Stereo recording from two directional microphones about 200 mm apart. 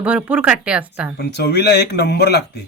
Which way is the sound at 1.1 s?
55° left (ahead or behind).